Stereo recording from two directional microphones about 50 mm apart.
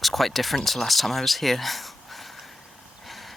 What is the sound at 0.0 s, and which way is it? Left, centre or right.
Speech, centre.